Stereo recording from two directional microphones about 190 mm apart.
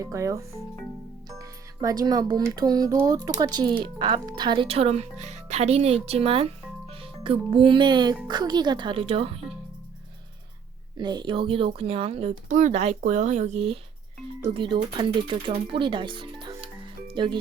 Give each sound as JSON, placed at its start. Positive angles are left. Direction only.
{"t": 0.0, "sound": "speech", "side_deg": -15}
{"t": 10.9, "sound": "speech", "side_deg": -20}